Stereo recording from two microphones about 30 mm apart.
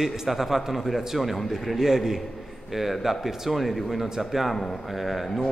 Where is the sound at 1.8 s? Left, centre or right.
Centre.